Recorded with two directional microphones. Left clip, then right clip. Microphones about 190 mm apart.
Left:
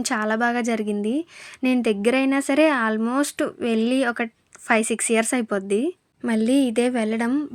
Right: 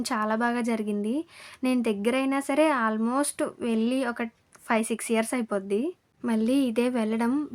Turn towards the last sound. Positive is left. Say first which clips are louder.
# left 4 dB
turn(degrees=20)  # may be behind; listen again after turning